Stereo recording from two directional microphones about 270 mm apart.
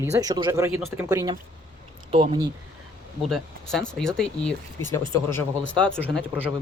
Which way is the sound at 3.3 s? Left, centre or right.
Centre.